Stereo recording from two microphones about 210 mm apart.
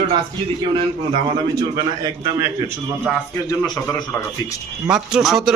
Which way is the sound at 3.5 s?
15° left (ahead or behind).